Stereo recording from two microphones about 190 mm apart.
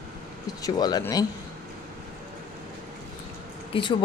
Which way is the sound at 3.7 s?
25° left (ahead or behind).